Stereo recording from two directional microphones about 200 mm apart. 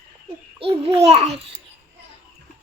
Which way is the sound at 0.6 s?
30° right (ahead or behind).